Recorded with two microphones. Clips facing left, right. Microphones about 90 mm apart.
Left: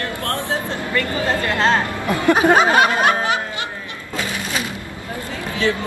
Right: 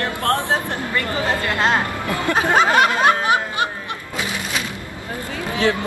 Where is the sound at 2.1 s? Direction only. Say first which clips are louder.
Left 5 dB; 20° left (ahead or behind).